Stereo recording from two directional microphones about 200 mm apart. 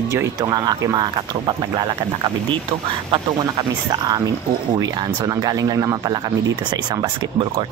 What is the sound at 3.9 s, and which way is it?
Speech, 20° right (ahead or behind).